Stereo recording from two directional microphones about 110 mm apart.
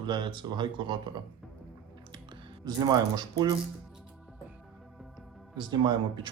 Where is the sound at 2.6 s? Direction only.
40° right (ahead or behind).